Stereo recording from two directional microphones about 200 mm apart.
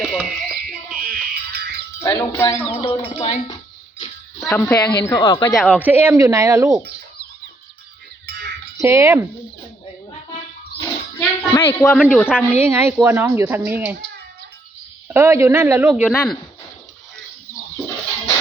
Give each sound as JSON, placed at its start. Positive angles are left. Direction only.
{"t": 0.0, "sound": "a sound", "side_deg": 0}
{"t": 0.9, "sound": "music", "side_deg": -45}
{"t": 2.0, "sound": "speech", "side_deg": 15}
{"t": 2.6, "sound": "a sound", "side_deg": 30}
{"t": 4.4, "sound": "speech", "side_deg": 5}
{"t": 5.1, "sound": "speech", "side_deg": 20}
{"t": 5.5, "sound": "speech", "side_deg": -5}
{"t": 8.3, "sound": "a sound", "side_deg": -50}
{"t": 8.8, "sound": "speech", "side_deg": -15}
{"t": 11.5, "sound": "speech", "side_deg": 10}
{"t": 12.1, "sound": "speech", "side_deg": -5}
{"t": 15.0, "sound": "speech", "side_deg": -10}
{"t": 15.9, "sound": "a man's voice", "side_deg": 0}